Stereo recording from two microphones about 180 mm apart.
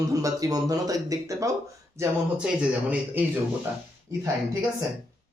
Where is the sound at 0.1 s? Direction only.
20° right (ahead or behind).